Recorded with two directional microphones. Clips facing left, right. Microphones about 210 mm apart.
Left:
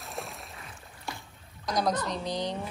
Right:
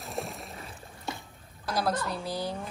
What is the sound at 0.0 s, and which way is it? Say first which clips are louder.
Boat: right 3 dB; centre (ahead or behind).